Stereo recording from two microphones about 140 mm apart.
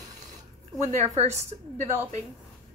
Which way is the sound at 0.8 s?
55° right (ahead or behind).